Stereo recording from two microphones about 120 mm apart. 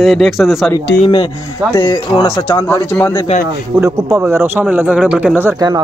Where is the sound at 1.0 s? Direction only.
45° left (ahead or behind).